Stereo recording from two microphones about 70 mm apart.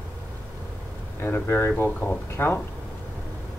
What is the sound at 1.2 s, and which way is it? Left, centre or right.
Speech, left.